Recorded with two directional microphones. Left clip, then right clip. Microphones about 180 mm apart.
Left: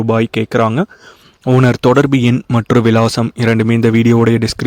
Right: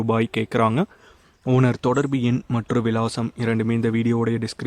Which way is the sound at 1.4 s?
40° left (ahead or behind).